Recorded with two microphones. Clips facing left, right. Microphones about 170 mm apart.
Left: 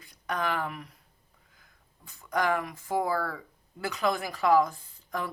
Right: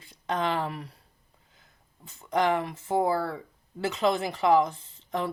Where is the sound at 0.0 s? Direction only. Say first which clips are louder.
Right 3 dB; 25° right (ahead or behind).